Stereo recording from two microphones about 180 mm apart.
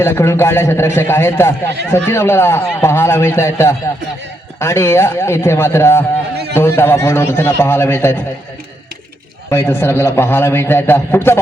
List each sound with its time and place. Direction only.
0.0 s a man's voice: 15° left (ahead or behind)
9.5 s a man's voice: 15° left (ahead or behind)